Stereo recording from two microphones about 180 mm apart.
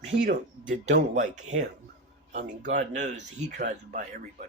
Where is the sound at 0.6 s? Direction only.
45° right (ahead or behind).